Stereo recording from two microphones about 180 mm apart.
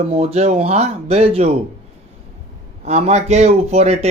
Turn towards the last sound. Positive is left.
turn(degrees=-35)  # may be behind; listen again after turning